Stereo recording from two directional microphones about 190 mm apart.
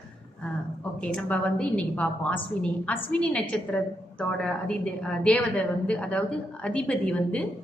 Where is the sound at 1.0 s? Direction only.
5° left (ahead or behind).